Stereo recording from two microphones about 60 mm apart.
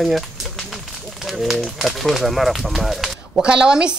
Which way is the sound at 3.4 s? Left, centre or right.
Centre.